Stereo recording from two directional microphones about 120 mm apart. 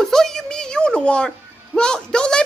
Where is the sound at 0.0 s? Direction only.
5° left (ahead or behind).